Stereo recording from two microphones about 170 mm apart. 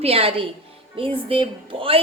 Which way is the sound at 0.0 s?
35° right (ahead or behind).